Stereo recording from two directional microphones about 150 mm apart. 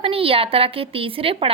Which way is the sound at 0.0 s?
40° right (ahead or behind).